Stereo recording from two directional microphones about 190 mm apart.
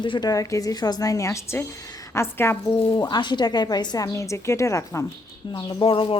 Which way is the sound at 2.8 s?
25° left (ahead or behind).